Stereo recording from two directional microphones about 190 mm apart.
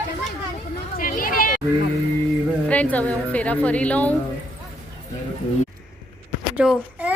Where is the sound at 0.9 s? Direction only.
45° left (ahead or behind).